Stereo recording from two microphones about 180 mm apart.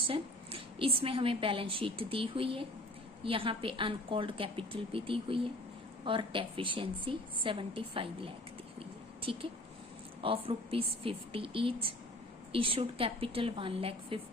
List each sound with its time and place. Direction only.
0.0 s a woman's voice: 30° right (ahead or behind)
8.8 s a sound: 30° right (ahead or behind)
10.2 s a woman's voice: 30° right (ahead or behind)